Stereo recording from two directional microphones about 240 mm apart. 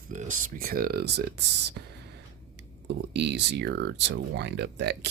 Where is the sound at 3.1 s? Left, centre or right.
Right.